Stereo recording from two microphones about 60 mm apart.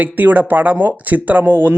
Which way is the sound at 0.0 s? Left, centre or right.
Right.